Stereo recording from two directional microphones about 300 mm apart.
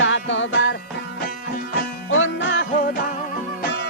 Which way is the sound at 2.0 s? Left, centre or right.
Left.